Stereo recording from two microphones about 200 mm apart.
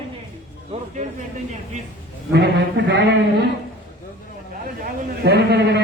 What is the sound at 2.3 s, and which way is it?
Speech, 55° right (ahead or behind).